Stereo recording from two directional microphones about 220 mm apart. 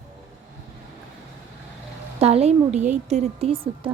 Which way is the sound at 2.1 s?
30° right (ahead or behind).